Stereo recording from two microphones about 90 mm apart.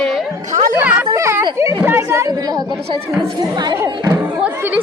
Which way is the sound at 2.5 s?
45° right (ahead or behind).